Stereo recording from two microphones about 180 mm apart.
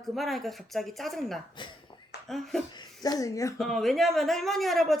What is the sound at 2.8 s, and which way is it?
Speech, 20° left (ahead or behind).